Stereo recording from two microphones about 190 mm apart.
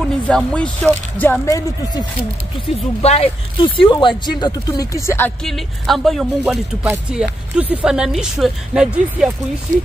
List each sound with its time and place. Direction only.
0.3 s speech: 5° left (ahead or behind)
3.0 s speech: 30° left (ahead or behind); by 9.3 s 5° right (ahead or behind)